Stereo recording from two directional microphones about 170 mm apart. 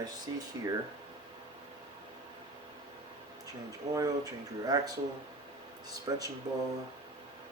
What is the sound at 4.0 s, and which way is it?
Speech, 20° right (ahead or behind).